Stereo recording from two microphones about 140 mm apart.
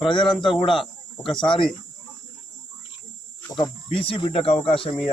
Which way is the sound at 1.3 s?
35° left (ahead or behind).